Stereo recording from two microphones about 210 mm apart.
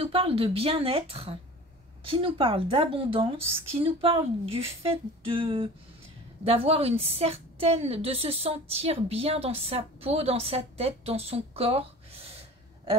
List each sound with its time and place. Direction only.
0.0 s a woman's voice: 25° right (ahead or behind)